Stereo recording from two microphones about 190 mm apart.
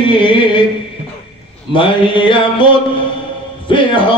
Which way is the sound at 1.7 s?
25° left (ahead or behind).